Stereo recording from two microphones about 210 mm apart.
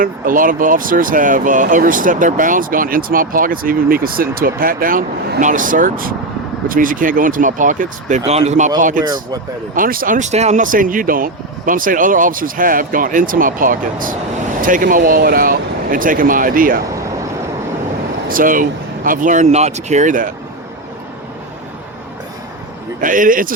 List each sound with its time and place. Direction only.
0.0 s speech: 40° right (ahead or behind)
18.3 s speech: 40° right (ahead or behind)
23.0 s speech: 40° right (ahead or behind)